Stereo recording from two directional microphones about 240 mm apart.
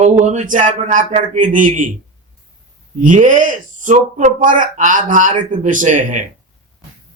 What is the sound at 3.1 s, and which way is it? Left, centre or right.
Speech, right.